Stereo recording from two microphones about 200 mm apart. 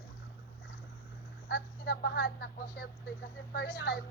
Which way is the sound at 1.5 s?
50° left (ahead or behind).